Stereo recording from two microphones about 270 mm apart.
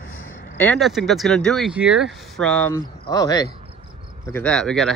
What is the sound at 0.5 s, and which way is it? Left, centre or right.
Speech, centre.